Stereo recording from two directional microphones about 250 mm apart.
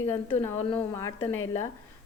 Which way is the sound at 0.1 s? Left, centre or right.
Centre.